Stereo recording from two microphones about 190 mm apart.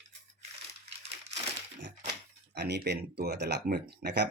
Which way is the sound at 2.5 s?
60° right (ahead or behind).